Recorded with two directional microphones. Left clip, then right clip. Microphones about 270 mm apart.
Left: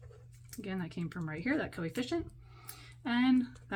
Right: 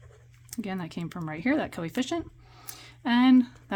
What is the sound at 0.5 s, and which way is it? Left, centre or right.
Speech, right.